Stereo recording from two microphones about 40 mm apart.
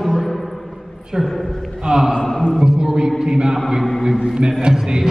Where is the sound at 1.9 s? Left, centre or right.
Centre.